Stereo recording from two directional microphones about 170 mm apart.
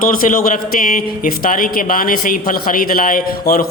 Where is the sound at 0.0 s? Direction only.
55° left (ahead or behind).